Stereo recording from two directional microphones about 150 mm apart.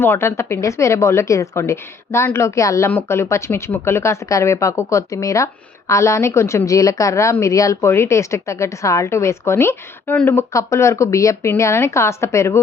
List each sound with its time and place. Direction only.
0.0 s a woman's voice: 15° left (ahead or behind)